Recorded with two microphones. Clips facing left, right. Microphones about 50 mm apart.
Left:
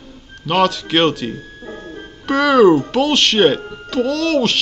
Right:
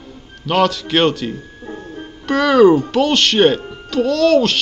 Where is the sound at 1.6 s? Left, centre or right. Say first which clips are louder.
Right 1 dB; left.